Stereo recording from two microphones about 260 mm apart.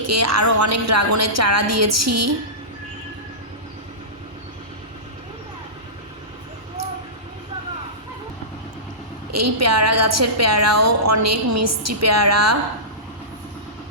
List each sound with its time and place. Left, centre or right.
0.1 s a woman's voice: right
9.3 s a woman's voice: right